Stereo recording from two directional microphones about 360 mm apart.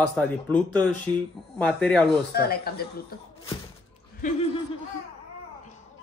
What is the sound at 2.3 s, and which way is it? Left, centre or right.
Speech, left.